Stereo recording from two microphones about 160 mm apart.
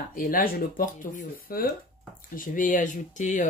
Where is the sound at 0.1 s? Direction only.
60° left (ahead or behind).